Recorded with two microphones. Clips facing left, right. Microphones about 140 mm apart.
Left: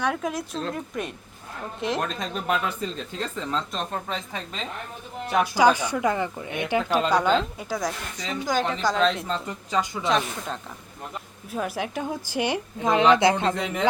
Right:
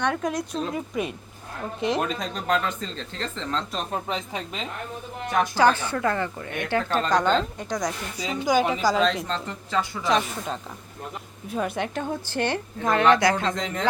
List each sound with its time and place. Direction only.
0.0 s speech: 5° left (ahead or behind)
3.9 s a woman's voice: 15° right (ahead or behind)
5.3 s speech: 10° left (ahead or behind)
8.2 s speech: 10° right (ahead or behind); by 10.1 s 15° left (ahead or behind)
10.1 s speech: centre (ahead or behind); by 13.5 s 25° left (ahead or behind)
13.5 s speech: 5° left (ahead or behind)